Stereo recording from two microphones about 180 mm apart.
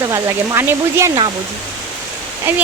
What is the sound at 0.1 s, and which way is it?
Speech, 15° right (ahead or behind).